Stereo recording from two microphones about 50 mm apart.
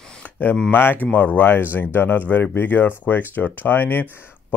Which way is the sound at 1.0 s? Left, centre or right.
Left.